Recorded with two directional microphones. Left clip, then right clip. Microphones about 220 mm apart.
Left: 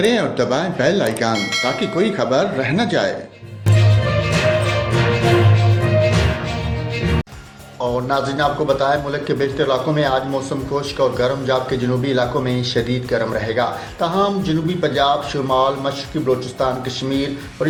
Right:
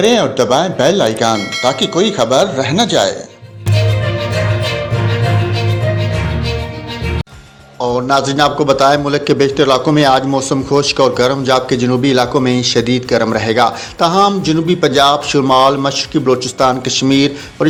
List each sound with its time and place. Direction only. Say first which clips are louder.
0.0 s speech: right 6 dB; 25° right (ahead or behind)
7.8 s a man's voice: right 6 dB; 25° right (ahead or behind)